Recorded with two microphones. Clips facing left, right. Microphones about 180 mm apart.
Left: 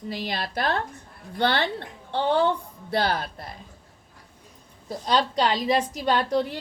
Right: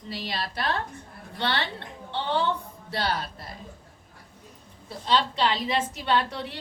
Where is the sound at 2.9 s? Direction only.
55° left (ahead or behind).